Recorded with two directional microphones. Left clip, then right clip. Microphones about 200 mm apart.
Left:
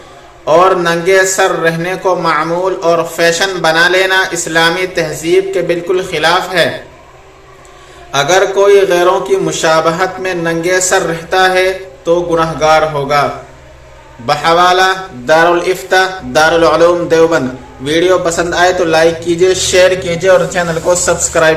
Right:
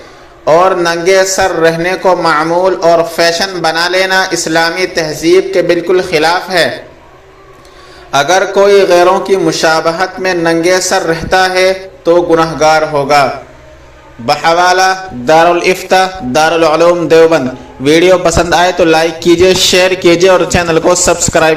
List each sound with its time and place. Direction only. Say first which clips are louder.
0.4 s a man's voice: right 1 dB; 20° right (ahead or behind)
8.1 s a man's voice: right 1 dB; 25° right (ahead or behind)
14.3 s mantra: right 1 dB; 15° right (ahead or behind); by 17.4 s 35° right (ahead or behind)
17.8 s a man's voice: right 4 dB; 35° right (ahead or behind)